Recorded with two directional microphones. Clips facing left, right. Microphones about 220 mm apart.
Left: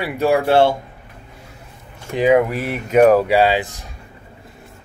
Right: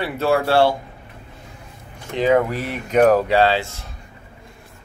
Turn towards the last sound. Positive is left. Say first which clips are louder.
# left 1 dB
turn(degrees=15)  # may be behind; listen again after turning